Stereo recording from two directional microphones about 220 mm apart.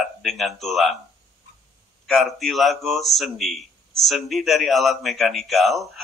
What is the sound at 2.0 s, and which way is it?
Speech, centre (ahead or behind).